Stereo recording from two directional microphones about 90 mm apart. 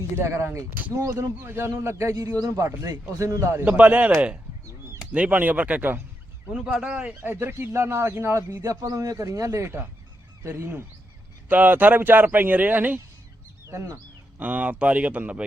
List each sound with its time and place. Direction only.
0.2 s speech: 30° right (ahead or behind)
3.6 s speech: 15° right (ahead or behind)
6.5 s speech: 5° right (ahead or behind)
7.2 s speech: 25° right (ahead or behind)
13.7 s speech: 35° right (ahead or behind)
14.3 s speech: 15° right (ahead or behind)